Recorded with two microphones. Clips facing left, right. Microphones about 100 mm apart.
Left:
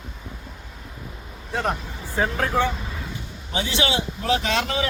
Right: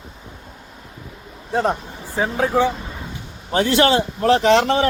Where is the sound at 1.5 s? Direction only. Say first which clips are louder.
Right 6 dB; 30° right (ahead or behind).